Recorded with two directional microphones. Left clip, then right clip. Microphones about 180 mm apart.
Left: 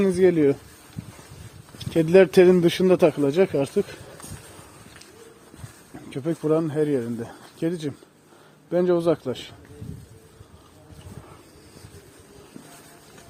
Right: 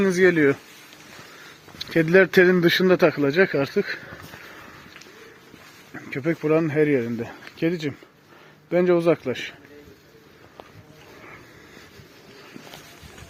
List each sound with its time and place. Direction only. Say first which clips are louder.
0.0 s speech: right 1 dB; centre (ahead or behind)
1.8 s speech: left 1 dB; 5° left (ahead or behind)
6.1 s speech: right 1 dB; centre (ahead or behind)